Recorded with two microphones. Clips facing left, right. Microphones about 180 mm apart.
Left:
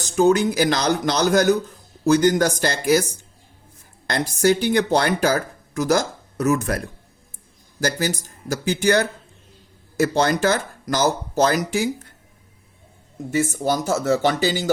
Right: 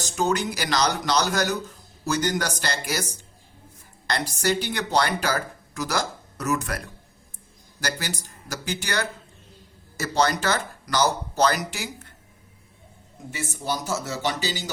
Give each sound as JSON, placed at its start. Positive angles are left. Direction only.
{"t": 0.2, "sound": "speech", "side_deg": 50}
{"t": 13.3, "sound": "speech", "side_deg": 45}